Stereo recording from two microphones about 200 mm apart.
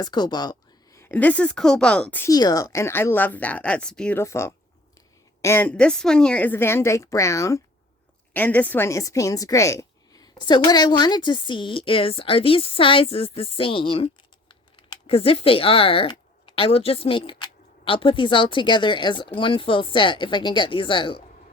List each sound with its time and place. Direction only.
0.0 s a woman's voice: 20° left (ahead or behind)